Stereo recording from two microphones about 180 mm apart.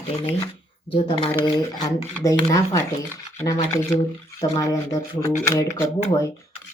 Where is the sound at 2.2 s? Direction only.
20° left (ahead or behind).